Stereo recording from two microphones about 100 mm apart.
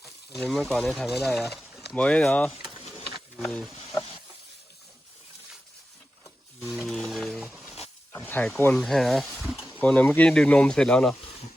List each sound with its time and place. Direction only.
0.3 s speech: centre (ahead or behind)
2.0 s speech: 10° left (ahead or behind)
6.6 s speech: 10° right (ahead or behind)
6.8 s speech: centre (ahead or behind)
8.2 s speech: 15° left (ahead or behind)
8.7 s speech: 5° left (ahead or behind)
9.4 s a sound: 5° right (ahead or behind)
9.6 s speech: 15° left (ahead or behind)